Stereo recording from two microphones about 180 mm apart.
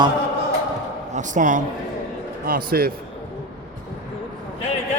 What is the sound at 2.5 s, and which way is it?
Speech, 55° right (ahead or behind).